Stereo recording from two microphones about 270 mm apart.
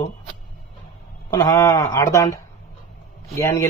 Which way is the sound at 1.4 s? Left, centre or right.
Centre.